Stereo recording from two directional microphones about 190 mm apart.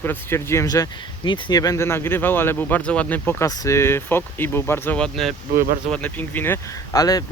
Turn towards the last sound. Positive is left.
turn(degrees=20)  # may be behind; listen again after turning